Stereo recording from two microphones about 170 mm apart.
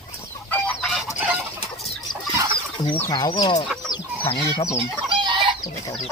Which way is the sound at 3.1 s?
25° left (ahead or behind).